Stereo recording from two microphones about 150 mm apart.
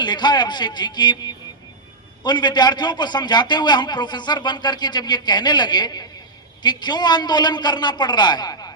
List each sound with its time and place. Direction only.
0.0 s a man's voice: 30° left (ahead or behind)